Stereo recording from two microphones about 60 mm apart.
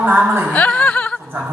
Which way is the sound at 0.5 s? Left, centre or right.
Left.